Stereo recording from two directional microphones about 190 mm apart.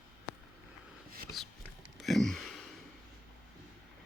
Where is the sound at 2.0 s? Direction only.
Centre (ahead or behind).